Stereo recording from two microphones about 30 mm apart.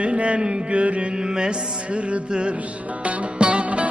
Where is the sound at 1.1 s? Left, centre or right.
Right.